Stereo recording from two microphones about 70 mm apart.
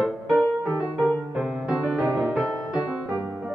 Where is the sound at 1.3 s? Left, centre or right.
Centre.